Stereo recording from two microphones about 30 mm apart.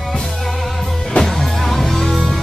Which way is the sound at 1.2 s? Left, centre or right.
Centre.